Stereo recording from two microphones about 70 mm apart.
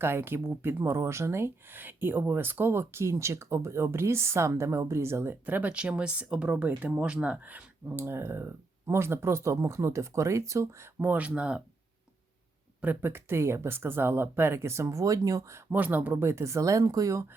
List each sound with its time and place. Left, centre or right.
0.0 s speech: right
11.0 s speech: right
12.8 s speech: right
15.7 s speech: right